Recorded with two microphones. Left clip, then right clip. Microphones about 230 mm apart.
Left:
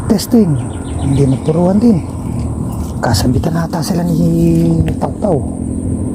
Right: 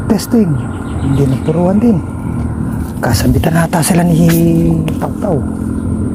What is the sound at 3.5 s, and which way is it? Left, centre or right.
Speech, right.